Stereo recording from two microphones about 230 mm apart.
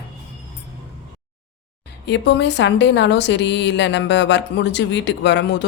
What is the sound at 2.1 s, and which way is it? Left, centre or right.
Speech, left.